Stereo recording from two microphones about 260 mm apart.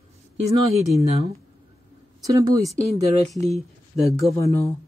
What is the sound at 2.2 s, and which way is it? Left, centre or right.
Speech, centre.